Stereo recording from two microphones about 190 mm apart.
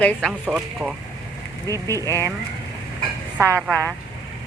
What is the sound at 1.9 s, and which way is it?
Speech, 15° right (ahead or behind).